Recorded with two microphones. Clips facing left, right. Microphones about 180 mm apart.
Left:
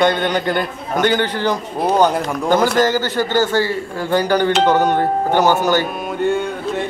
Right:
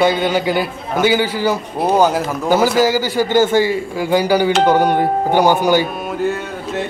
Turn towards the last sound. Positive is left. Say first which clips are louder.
# left 2 dB
turn(degrees=0)  # may be behind; listen again after turning